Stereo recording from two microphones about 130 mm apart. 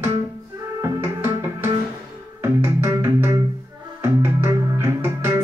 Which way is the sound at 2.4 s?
20° right (ahead or behind).